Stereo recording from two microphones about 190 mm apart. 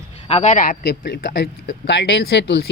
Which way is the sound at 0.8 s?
60° left (ahead or behind).